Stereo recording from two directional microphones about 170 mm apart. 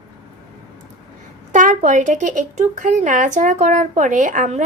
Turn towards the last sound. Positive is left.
turn(degrees=-45)  # may be behind; listen again after turning